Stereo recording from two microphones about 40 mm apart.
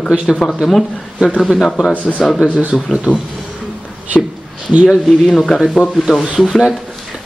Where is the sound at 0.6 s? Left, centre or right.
Centre.